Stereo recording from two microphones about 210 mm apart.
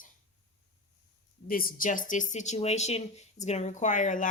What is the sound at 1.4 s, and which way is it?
Speech, 45° left (ahead or behind).